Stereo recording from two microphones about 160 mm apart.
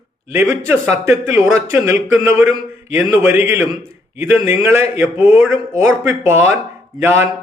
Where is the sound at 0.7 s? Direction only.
15° right (ahead or behind).